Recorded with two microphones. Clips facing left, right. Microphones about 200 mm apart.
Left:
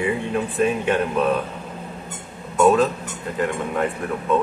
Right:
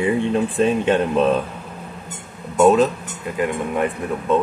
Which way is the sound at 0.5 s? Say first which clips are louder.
Right 1 dB; 25° right (ahead or behind).